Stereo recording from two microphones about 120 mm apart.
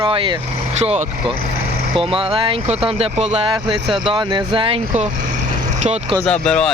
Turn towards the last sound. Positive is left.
turn(degrees=5)  # may be behind; listen again after turning